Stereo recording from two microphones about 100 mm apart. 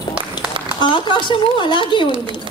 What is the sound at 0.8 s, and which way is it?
A woman's voice, 55° left (ahead or behind).